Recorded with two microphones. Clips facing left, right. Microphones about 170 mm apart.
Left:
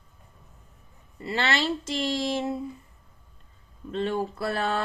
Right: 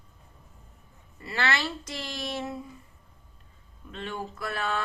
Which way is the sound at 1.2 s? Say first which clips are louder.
Left 3 dB; 25° left (ahead or behind).